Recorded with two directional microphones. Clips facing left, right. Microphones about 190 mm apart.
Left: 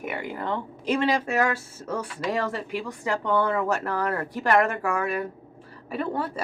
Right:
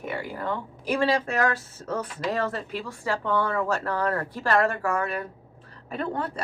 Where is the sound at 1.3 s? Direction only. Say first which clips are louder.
Left 1 dB; 10° left (ahead or behind).